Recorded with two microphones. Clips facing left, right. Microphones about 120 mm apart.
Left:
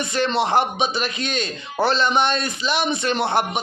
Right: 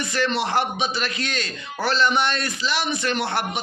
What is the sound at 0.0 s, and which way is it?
Speech, 20° left (ahead or behind).